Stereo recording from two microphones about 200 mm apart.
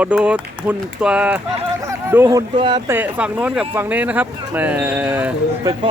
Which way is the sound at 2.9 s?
5° right (ahead or behind).